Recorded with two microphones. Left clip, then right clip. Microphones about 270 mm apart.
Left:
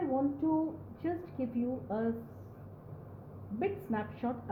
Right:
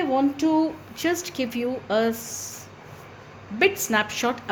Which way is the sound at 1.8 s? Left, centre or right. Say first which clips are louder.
Right 16 dB; right.